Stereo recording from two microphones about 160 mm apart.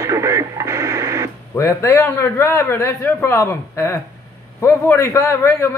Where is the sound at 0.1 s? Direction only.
20° right (ahead or behind).